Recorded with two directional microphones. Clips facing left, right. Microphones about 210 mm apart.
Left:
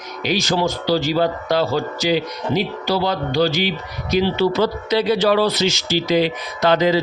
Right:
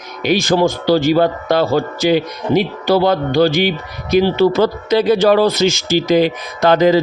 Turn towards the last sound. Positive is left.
turn(degrees=-50)  # may be behind; listen again after turning